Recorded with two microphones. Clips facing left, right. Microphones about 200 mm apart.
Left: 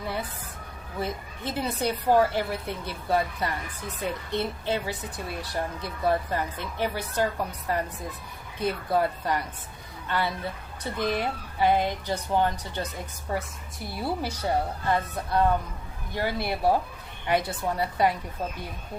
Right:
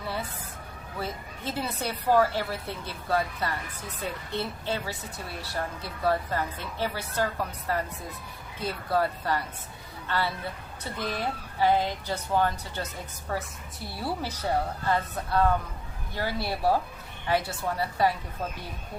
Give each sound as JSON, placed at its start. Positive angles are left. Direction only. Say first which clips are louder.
{"t": 0.9, "sound": "a woman's voice", "louder": "left 3 dB", "side_deg": 15}
{"t": 8.5, "sound": "a woman's voice", "louder": "left 2 dB", "side_deg": 15}